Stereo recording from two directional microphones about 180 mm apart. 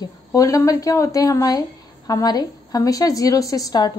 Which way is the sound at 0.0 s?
20° left (ahead or behind).